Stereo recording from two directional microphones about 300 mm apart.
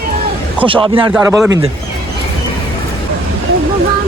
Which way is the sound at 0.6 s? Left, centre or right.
Centre.